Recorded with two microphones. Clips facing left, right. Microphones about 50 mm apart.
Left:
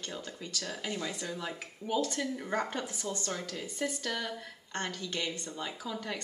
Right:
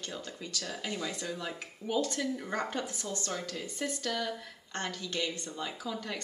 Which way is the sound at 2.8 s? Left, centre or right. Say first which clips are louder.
Even; centre.